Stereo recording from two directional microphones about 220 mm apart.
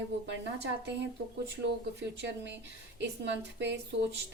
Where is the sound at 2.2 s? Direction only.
50° right (ahead or behind).